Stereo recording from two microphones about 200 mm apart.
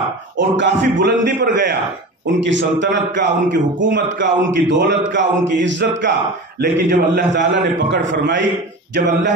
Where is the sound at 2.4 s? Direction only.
65° right (ahead or behind).